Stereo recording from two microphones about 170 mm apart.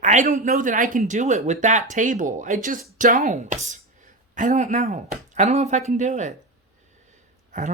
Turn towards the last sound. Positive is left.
turn(degrees=-50)  # may be behind; listen again after turning